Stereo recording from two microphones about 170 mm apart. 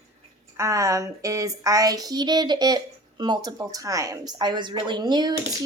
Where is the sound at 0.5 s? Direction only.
20° right (ahead or behind).